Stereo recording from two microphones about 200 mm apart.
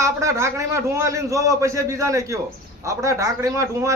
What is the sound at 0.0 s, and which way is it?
A man's voice, 15° right (ahead or behind).